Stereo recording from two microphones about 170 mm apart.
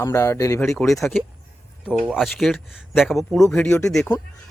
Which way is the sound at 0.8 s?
Centre (ahead or behind).